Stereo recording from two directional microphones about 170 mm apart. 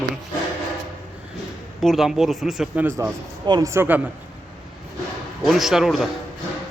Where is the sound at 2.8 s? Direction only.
15° right (ahead or behind).